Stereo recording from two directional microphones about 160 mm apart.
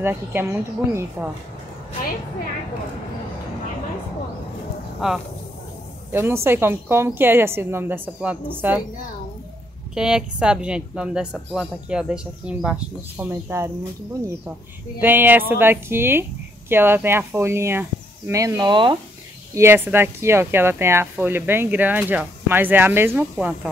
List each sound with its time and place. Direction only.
0.0 s speech: 15° right (ahead or behind)
5.0 s speech: 5° right (ahead or behind)
6.1 s speech: 15° right (ahead or behind)
9.9 s speech: 5° right (ahead or behind)
15.0 s speech: 10° right (ahead or behind); by 18.9 s 30° right (ahead or behind)
19.5 s speech: 15° right (ahead or behind)